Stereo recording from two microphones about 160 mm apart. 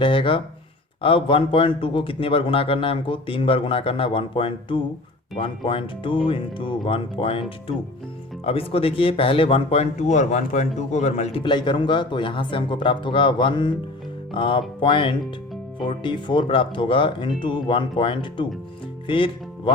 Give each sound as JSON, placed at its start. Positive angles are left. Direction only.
{"t": 0.0, "sound": "a man's voice", "side_deg": 30}
{"t": 8.4, "sound": "a man's voice", "side_deg": 35}